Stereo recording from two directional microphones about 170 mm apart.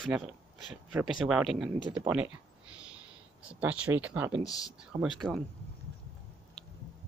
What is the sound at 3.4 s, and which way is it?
Speech, 5° right (ahead or behind).